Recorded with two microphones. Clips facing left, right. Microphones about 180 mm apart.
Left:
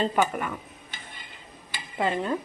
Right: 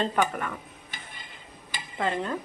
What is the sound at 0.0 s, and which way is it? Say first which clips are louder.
Speech: left 2 dB; 15° left (ahead or behind).